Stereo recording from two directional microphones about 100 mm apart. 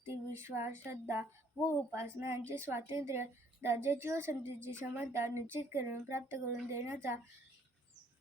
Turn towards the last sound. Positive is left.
turn(degrees=-25)  # may be behind; listen again after turning